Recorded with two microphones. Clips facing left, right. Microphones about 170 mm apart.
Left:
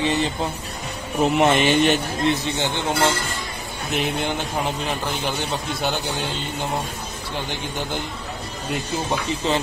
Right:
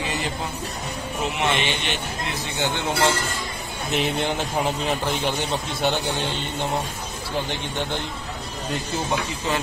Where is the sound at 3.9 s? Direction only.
Centre (ahead or behind).